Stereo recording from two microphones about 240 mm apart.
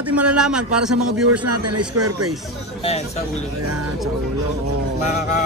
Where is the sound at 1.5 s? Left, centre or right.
Right.